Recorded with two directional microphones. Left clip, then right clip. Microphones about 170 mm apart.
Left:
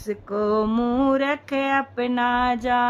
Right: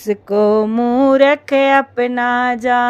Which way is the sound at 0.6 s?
10° right (ahead or behind).